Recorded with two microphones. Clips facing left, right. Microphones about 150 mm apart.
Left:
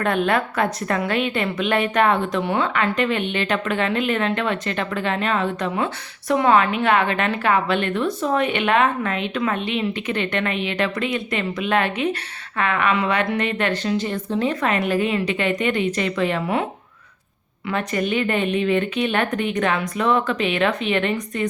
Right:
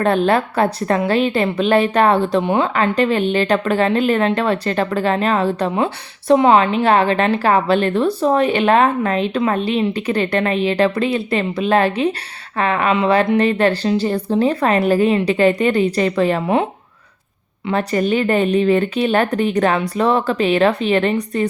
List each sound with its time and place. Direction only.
0.0 s a woman's voice: 30° right (ahead or behind)
2.7 s a woman's voice: 35° right (ahead or behind)
17.7 s a woman's voice: 35° right (ahead or behind)